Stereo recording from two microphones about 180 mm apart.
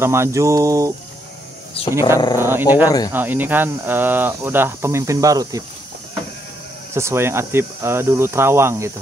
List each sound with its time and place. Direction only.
0.0 s speech: 15° right (ahead or behind)
2.1 s speech: 20° left (ahead or behind)
2.4 s speech: 10° right (ahead or behind)
6.9 s speech: 15° right (ahead or behind)